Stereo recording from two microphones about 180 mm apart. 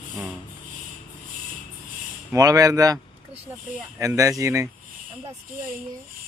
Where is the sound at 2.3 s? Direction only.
20° right (ahead or behind).